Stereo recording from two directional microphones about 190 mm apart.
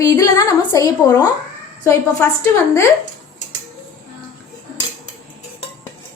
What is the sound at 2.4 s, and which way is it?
Speech, 15° left (ahead or behind).